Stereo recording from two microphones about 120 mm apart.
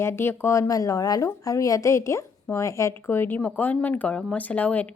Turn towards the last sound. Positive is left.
turn(degrees=10)  # may be behind; listen again after turning